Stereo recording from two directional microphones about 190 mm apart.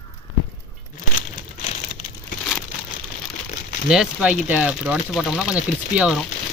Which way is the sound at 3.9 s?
5° right (ahead or behind).